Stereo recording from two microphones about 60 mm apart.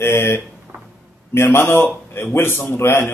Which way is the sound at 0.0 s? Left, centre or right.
Left.